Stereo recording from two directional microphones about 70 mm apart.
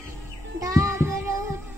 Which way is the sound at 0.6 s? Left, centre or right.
Right.